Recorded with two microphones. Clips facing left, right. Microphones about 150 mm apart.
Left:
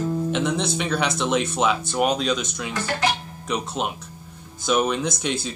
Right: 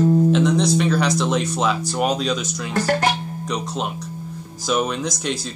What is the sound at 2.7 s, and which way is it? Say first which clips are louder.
Speech: right 5 dB; 40° right (ahead or behind).